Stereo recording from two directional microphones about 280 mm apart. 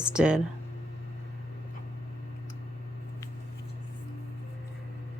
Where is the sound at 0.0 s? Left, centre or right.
Centre.